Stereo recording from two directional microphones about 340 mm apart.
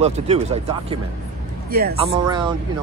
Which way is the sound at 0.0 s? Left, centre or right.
Centre.